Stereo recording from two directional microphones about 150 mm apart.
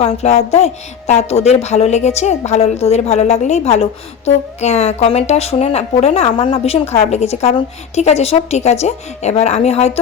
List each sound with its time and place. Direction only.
0.0 s a woman's voice: 45° left (ahead or behind)